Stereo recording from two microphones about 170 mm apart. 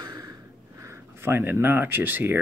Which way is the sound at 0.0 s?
25° right (ahead or behind).